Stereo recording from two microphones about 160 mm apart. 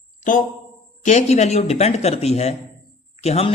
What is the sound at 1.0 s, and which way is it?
Speech, 45° left (ahead or behind).